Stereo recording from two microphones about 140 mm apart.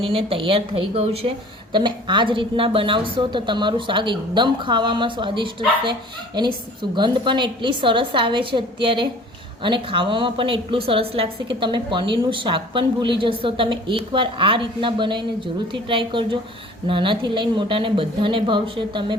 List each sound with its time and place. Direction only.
0.0 s a woman's voice: 40° right (ahead or behind)